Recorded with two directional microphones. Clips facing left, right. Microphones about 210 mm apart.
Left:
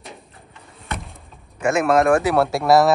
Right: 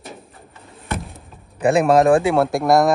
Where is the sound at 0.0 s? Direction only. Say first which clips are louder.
Right 3 dB; centre (ahead or behind).